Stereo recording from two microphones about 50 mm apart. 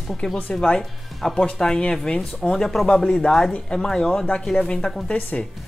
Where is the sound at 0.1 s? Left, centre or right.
Centre.